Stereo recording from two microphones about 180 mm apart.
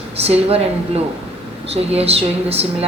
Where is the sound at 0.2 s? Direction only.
35° right (ahead or behind).